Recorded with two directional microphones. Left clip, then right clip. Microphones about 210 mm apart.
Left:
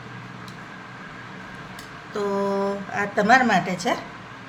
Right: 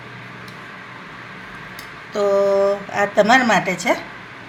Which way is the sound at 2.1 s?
20° right (ahead or behind).